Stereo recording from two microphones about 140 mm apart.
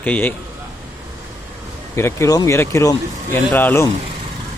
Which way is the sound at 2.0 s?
20° left (ahead or behind).